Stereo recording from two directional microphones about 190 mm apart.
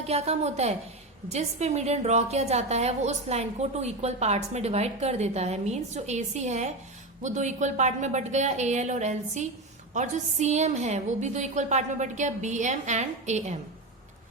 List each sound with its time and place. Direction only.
0.0 s a woman's voice: 35° right (ahead or behind)